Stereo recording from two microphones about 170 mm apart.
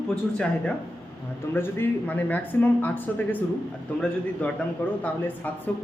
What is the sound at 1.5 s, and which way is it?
A man's voice, 10° left (ahead or behind).